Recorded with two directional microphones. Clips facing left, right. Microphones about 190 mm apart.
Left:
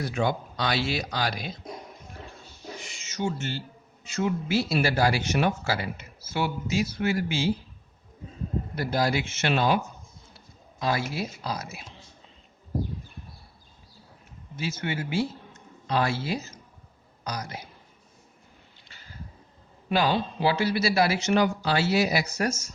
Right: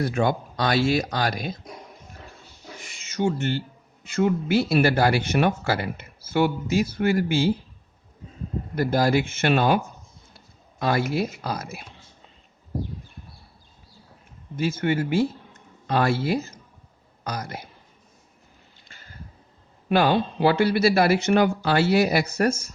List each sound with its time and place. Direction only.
0.0 s speech: 55° right (ahead or behind)
3.0 s speech: 55° right (ahead or behind)
8.7 s speech: 50° right (ahead or behind)
14.5 s speech: 55° right (ahead or behind)
18.9 s a sound: 50° right (ahead or behind)
19.9 s speech: 55° right (ahead or behind)